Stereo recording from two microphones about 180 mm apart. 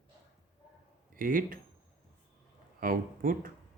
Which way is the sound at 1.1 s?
50° right (ahead or behind).